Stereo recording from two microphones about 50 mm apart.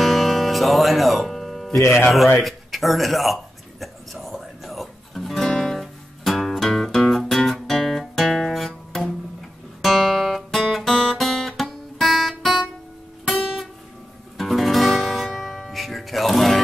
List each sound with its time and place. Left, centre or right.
0.0 s music: centre
1.7 s speech: left
2.4 s speech: centre
3.8 s music: centre
9.8 s guitar: centre
13.3 s music: centre
14.3 s guitar: centre